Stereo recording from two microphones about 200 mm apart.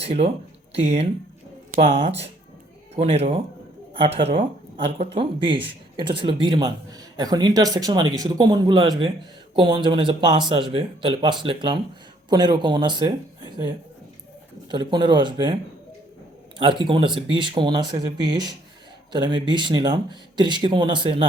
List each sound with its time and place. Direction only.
0.0 s a man's voice: 30° right (ahead or behind)
16.6 s a man's voice: 25° right (ahead or behind)